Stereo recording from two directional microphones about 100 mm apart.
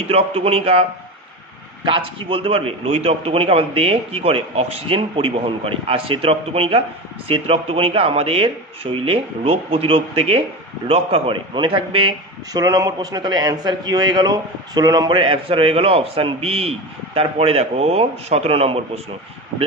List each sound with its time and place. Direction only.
0.1 s speech: 80° right
1.8 s a man's voice: 60° right (ahead or behind)
12.5 s a man's voice: 35° right (ahead or behind)
15.1 s a man's voice: 60° right (ahead or behind); by 18.8 s 80° right